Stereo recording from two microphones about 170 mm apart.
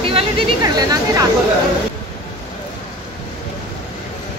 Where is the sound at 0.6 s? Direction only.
20° right (ahead or behind).